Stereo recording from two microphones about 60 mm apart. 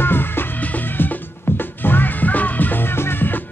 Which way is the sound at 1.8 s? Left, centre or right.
Left.